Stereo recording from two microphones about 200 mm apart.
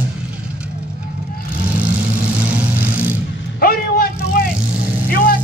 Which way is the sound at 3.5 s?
50° left (ahead or behind).